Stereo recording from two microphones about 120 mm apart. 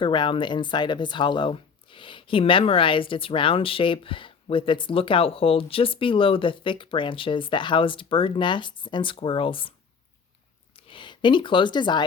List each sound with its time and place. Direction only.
0.0 s speech: 45° left (ahead or behind)
10.8 s speech: 45° left (ahead or behind)